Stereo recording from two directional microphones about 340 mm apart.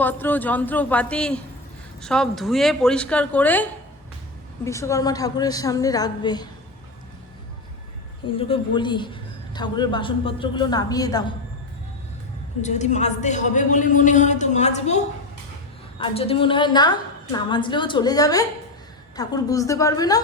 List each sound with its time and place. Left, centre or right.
0.0 s a woman's voice: centre
8.3 s a woman's voice: centre
12.6 s a man's voice: left